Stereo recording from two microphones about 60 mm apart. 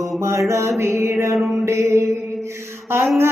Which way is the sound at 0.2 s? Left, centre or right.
Right.